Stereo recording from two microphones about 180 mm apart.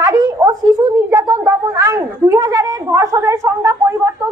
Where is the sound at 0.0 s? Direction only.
20° right (ahead or behind).